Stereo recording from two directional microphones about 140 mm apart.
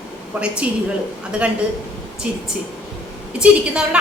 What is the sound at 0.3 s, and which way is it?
Speech, 10° right (ahead or behind).